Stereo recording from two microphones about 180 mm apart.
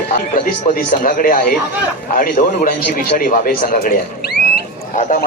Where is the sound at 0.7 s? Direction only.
50° left (ahead or behind).